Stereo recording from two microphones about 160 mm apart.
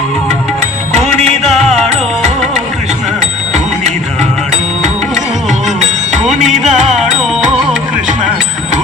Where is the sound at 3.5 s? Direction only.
45° right (ahead or behind).